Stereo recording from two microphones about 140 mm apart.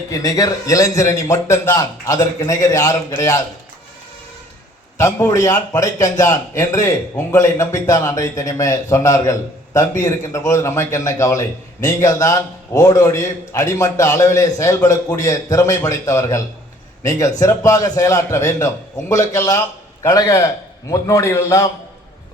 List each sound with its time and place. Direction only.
0.1 s a man's voice: 25° left (ahead or behind)
4.9 s a man's voice: 20° left (ahead or behind)